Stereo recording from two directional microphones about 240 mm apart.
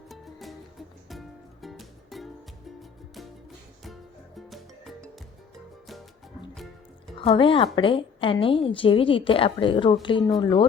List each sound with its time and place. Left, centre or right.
0.1 s music: centre
4.4 s music: centre
7.2 s a woman's voice: left